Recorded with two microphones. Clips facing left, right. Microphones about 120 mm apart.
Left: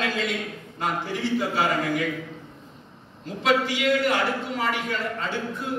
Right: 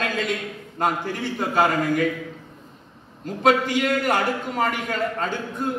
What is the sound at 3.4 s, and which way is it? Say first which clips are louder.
A man's voice: right 3 dB; 50° right (ahead or behind).